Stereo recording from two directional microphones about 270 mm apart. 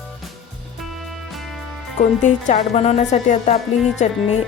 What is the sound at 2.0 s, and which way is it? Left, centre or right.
Speech, left.